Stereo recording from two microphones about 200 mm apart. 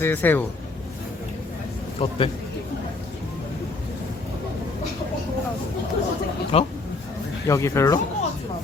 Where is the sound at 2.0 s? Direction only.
25° left (ahead or behind).